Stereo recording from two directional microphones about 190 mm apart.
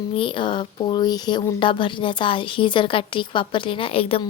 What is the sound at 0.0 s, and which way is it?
Speech, 25° left (ahead or behind).